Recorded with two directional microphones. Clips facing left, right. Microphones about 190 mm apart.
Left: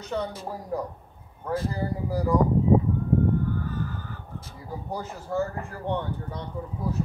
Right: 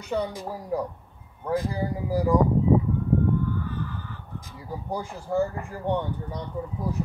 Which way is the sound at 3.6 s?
45° left (ahead or behind).